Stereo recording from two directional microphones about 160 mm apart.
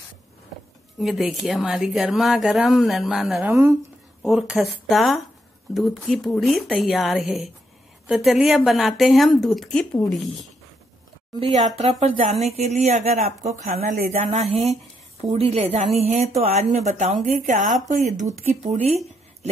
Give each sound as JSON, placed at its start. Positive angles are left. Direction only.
{"t": 0.9, "sound": "a woman's voice", "side_deg": 0}
{"t": 3.4, "sound": "speech", "side_deg": -15}
{"t": 4.2, "sound": "a woman's voice", "side_deg": 0}
{"t": 11.3, "sound": "a woman's voice", "side_deg": -35}